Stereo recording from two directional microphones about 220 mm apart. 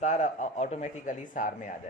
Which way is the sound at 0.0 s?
35° left (ahead or behind).